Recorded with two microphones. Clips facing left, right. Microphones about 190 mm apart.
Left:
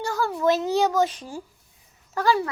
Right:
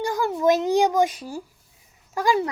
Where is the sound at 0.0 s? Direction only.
15° right (ahead or behind).